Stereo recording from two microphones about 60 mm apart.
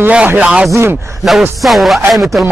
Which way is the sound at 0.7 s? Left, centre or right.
Right.